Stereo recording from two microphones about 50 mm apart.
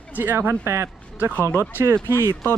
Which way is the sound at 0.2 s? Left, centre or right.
Right.